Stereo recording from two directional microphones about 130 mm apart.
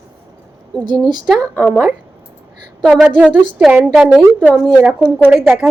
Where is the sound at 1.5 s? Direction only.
Centre (ahead or behind).